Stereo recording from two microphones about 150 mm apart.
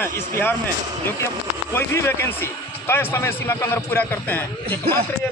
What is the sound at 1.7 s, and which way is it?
Speech, 15° left (ahead or behind).